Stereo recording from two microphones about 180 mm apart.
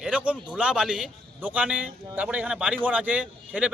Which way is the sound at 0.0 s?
5° right (ahead or behind).